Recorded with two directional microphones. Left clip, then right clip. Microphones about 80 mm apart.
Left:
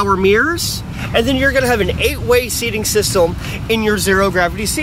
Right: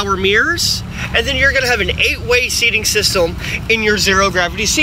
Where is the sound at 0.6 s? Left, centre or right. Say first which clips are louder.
Right 5 dB; left.